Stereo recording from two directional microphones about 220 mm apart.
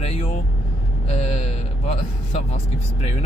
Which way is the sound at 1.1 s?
30° left (ahead or behind).